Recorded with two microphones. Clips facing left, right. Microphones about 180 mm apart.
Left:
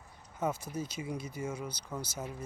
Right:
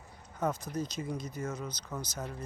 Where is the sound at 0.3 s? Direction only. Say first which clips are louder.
Right 1 dB; 10° left (ahead or behind).